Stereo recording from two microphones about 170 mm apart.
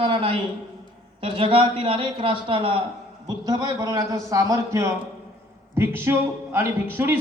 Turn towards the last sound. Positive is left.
turn(degrees=-15)  # may be behind; listen again after turning